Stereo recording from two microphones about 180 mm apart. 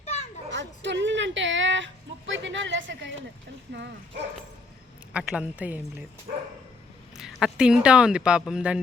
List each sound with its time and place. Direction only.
0.0 s children playing: 35° left (ahead or behind)
0.5 s a sound: 80° right
3.7 s speech: 70° right (ahead or behind)
5.1 s a woman's voice: 5° right (ahead or behind)
7.2 s speech: centre (ahead or behind)